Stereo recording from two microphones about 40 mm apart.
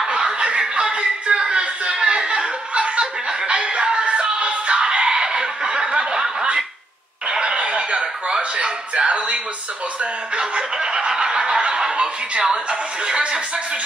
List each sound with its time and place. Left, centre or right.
0.0 s a sound: centre
7.2 s chuckle: right
10.3 s snicker: right